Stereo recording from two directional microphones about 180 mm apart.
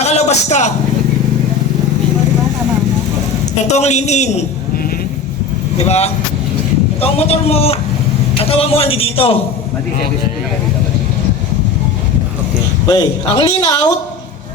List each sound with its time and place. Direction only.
0.0 s a sound: 40° left (ahead or behind)
3.7 s a man's voice: 40° left (ahead or behind)
5.7 s a man's voice: 35° left (ahead or behind)
12.9 s speech: 25° left (ahead or behind)